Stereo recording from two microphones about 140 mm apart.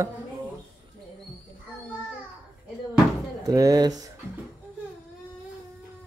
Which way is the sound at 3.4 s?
25° right (ahead or behind).